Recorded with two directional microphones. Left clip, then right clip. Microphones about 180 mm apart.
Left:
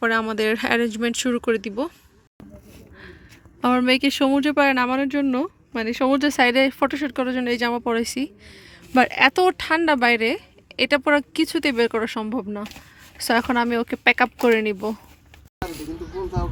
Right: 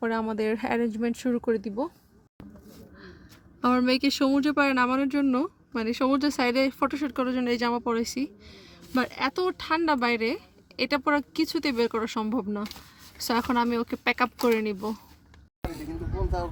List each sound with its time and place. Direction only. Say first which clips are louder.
0.0 s speech: left 7 dB; centre (ahead or behind)
3.6 s speech: left 5 dB; 10° left (ahead or behind)
13.2 s speech: left 5 dB; 10° left (ahead or behind)